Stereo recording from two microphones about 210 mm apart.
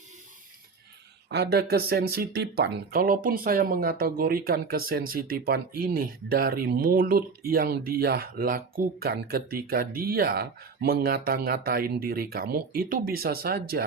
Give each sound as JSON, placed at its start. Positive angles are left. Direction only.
{"t": 1.3, "sound": "speech", "side_deg": -50}